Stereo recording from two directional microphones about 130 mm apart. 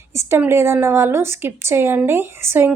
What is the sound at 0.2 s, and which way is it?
A woman's voice, 20° right (ahead or behind).